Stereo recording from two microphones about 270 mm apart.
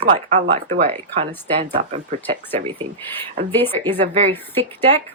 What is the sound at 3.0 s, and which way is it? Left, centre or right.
Speech, centre.